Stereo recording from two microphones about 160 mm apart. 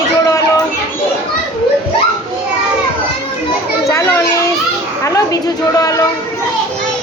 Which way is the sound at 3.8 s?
20° left (ahead or behind).